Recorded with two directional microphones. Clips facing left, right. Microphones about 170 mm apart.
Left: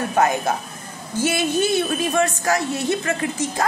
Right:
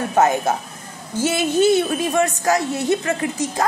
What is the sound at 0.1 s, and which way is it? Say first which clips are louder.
A woman's voice: right 3 dB; 20° right (ahead or behind).